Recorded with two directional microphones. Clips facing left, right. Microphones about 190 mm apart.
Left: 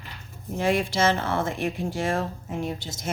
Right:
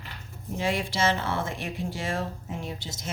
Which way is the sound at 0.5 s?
50° left (ahead or behind).